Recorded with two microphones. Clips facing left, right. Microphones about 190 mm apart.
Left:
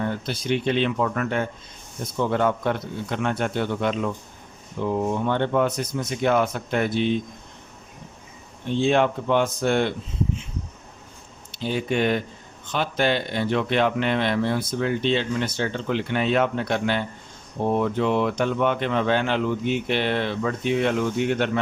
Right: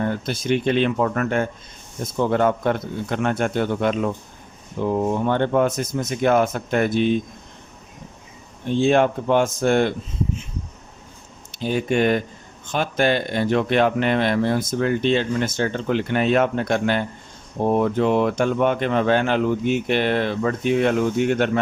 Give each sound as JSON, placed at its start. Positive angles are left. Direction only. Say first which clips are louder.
{"t": 0.0, "sound": "speech", "louder": "right 3 dB", "side_deg": -50}
{"t": 8.8, "sound": "speech", "louder": "right 3 dB", "side_deg": -45}
{"t": 11.5, "sound": "speech", "louder": "right 3 dB", "side_deg": -45}